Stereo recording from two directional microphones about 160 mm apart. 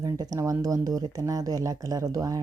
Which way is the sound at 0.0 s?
20° right (ahead or behind).